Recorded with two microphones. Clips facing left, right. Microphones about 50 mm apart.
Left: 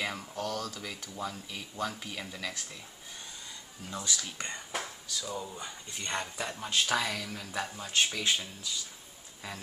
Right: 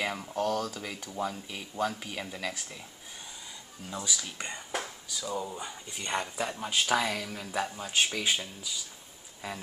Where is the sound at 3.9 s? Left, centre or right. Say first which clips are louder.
Right 1 dB; centre.